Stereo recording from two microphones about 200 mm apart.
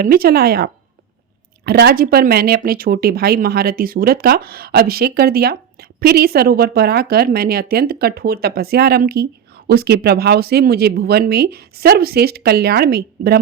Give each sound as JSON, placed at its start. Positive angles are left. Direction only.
{"t": 0.0, "sound": "speech", "side_deg": -50}